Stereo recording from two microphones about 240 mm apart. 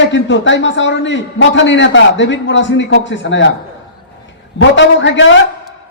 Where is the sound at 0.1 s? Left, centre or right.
Left.